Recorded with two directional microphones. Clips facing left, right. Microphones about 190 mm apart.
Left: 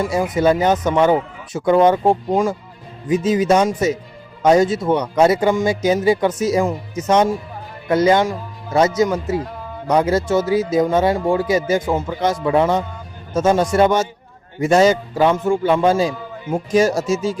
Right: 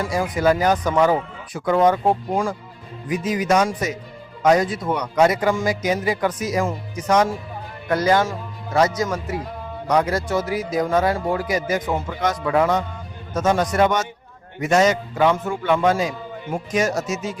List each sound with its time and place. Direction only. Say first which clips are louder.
0.1 s a man's voice: left 1 dB; 25° left (ahead or behind)